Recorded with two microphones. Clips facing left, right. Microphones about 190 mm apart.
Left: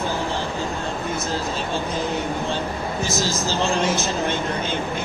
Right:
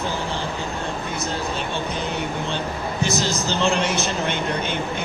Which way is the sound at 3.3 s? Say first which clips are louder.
Right 1 dB; 65° right (ahead or behind).